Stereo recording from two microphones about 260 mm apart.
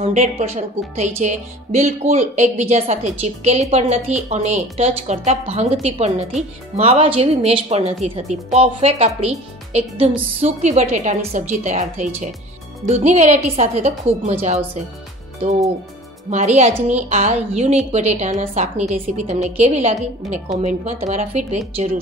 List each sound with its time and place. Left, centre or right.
0.0 s a woman's voice: right
16.3 s a woman's voice: right